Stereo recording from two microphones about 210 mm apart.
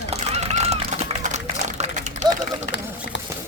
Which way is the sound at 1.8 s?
35° right (ahead or behind).